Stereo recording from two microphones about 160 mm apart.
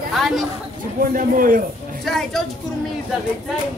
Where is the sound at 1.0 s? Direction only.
60° right (ahead or behind).